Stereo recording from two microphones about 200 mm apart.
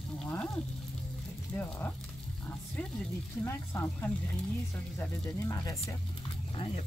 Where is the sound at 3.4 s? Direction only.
10° left (ahead or behind).